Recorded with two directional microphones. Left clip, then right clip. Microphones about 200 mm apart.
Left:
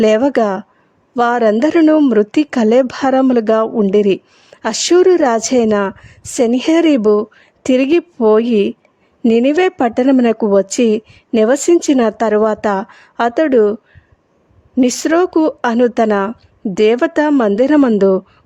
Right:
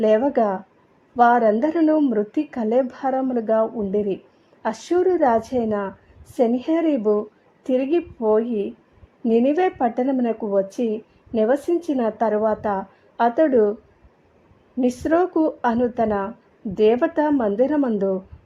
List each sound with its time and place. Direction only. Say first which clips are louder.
0.0 s a woman's voice: left 6 dB; 40° left (ahead or behind)
14.8 s a woman's voice: left 7 dB; 40° left (ahead or behind)